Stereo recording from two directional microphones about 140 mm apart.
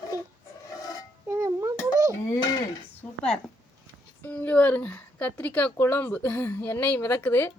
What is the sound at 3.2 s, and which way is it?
A woman's voice, 5° left (ahead or behind).